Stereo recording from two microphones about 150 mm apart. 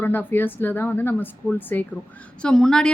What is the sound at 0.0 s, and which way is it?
A woman's voice, 10° left (ahead or behind).